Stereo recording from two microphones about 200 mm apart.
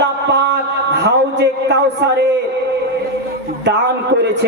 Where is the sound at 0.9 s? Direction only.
60° right (ahead or behind).